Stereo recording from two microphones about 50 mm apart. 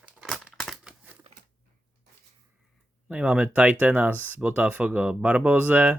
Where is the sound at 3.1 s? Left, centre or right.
Right.